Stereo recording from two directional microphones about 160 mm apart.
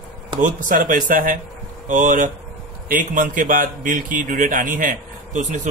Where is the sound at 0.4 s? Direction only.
55° right (ahead or behind).